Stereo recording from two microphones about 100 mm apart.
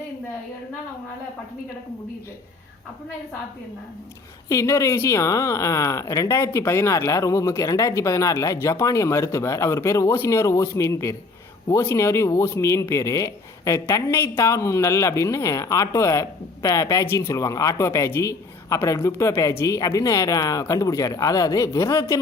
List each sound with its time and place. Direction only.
4.4 s speech: 30° left (ahead or behind)